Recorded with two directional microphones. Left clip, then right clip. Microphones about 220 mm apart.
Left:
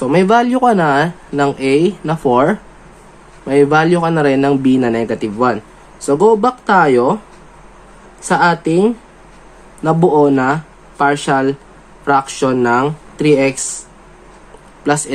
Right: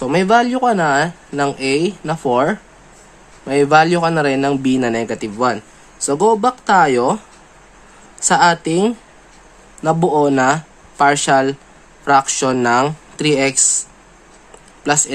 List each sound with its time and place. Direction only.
0.0 s speech: 10° right (ahead or behind)
8.3 s speech: 15° right (ahead or behind)
14.8 s speech: 15° right (ahead or behind)